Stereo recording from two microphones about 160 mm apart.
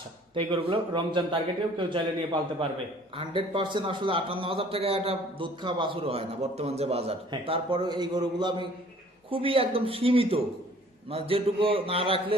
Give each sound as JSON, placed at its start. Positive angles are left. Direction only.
{"t": 0.3, "sound": "a man's voice", "side_deg": -30}